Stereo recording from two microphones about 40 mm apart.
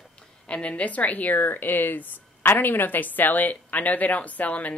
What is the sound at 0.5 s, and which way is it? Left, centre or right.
Speech, left.